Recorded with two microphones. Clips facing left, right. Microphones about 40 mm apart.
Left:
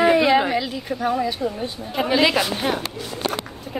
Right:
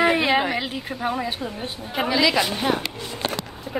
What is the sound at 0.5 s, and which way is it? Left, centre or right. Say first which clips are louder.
A woman's voice: left 3 dB; right.